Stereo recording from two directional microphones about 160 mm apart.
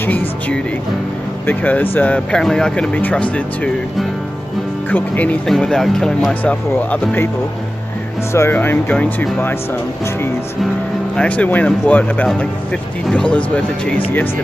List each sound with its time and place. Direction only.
0.0 s speech: 10° left (ahead or behind)
4.9 s speech: 10° left (ahead or behind)
8.3 s speech: 15° left (ahead or behind)
11.1 s speech: 10° left (ahead or behind)